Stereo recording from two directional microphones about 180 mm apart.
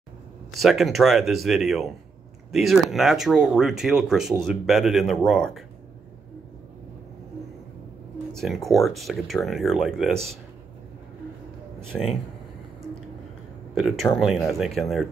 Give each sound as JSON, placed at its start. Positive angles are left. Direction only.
{"t": 0.6, "sound": "speech", "side_deg": 0}
{"t": 8.3, "sound": "speech", "side_deg": 0}
{"t": 11.9, "sound": "speech", "side_deg": 0}
{"t": 13.7, "sound": "speech", "side_deg": 0}